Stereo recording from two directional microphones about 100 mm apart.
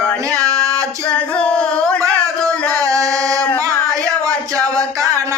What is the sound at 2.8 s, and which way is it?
Chant, 35° right (ahead or behind).